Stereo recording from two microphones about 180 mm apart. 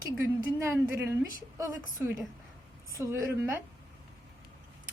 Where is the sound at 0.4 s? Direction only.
15° right (ahead or behind).